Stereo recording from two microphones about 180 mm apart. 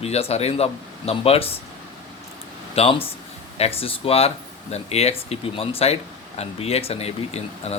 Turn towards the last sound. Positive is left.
turn(degrees=35)  # may be behind; listen again after turning